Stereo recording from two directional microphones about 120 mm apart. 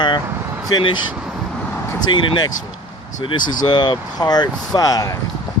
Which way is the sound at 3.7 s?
40° left (ahead or behind).